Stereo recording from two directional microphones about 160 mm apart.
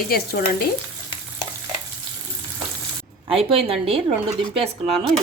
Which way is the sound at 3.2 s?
35° right (ahead or behind).